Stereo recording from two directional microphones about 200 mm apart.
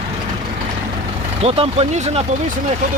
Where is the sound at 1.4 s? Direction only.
30° right (ahead or behind).